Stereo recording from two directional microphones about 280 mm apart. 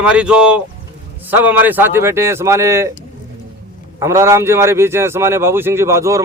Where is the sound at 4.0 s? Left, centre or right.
Centre.